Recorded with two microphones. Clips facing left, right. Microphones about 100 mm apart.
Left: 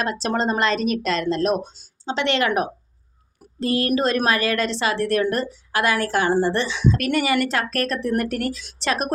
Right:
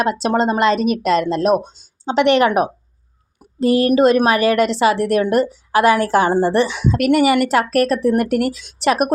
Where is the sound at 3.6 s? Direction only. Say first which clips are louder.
Right 8 dB; 20° right (ahead or behind).